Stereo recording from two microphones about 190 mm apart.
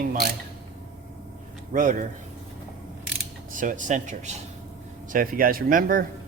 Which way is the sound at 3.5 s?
45° right (ahead or behind).